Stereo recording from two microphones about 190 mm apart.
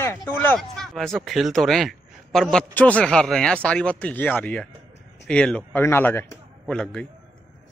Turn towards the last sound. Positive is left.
turn(degrees=5)  # may be behind; listen again after turning